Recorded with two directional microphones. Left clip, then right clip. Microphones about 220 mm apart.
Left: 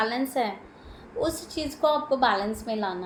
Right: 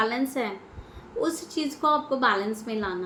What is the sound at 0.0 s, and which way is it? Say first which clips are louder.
Speech: even; 25° right (ahead or behind).